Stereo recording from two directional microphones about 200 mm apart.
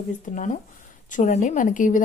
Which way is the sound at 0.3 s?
40° left (ahead or behind).